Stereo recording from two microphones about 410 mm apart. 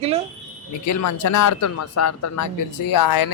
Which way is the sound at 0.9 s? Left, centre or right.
Left.